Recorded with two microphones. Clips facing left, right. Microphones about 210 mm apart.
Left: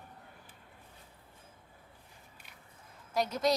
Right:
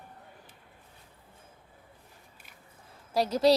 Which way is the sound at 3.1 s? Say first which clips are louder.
Right 6 dB; 35° right (ahead or behind).